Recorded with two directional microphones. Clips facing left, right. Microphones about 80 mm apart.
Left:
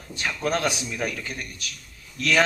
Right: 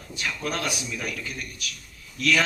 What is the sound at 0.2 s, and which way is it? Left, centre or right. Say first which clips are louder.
A man's voice: left 4 dB; left.